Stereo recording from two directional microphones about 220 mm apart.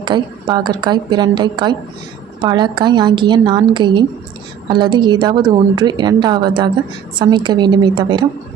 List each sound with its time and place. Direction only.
0.0 s a woman's voice: 20° right (ahead or behind)